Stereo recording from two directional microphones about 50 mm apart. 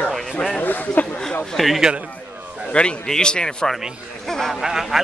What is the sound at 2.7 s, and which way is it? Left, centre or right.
A man's voice, centre.